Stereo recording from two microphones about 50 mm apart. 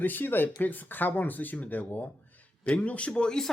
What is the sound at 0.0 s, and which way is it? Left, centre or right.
Speech, left.